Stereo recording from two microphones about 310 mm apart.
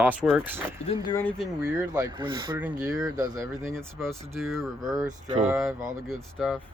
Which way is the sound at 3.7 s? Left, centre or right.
Centre.